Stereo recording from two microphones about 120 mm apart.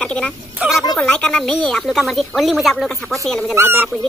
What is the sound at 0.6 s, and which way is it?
Speech, 5° right (ahead or behind).